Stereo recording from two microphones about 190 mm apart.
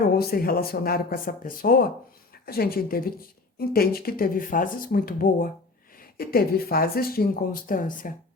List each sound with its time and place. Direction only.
0.2 s speech: 50° left (ahead or behind)